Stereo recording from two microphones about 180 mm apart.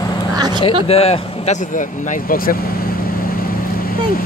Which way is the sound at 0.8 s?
35° left (ahead or behind).